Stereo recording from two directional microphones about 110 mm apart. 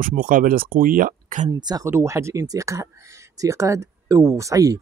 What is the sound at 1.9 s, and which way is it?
Speech, 25° right (ahead or behind).